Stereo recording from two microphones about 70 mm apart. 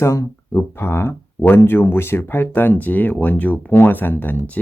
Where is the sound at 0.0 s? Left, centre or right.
Left.